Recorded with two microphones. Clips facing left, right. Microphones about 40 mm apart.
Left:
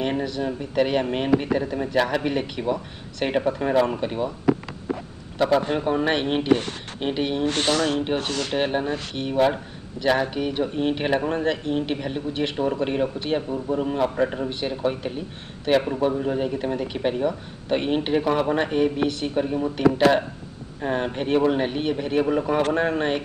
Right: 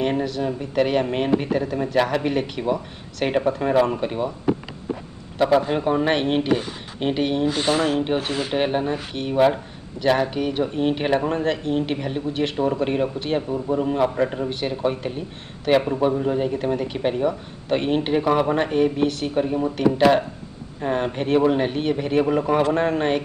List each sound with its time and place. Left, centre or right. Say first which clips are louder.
0.0 s speech: right 2 dB; centre
5.4 s a man's voice: right 2 dB; centre
7.4 s speech: even; left
8.2 s speech: right 2 dB; left
8.5 s speech: right 2 dB; centre
19.3 s speech: right 2 dB; centre